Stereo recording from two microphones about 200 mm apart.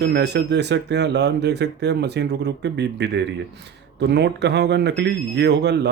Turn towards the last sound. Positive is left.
turn(degrees=-60)  # may be behind; listen again after turning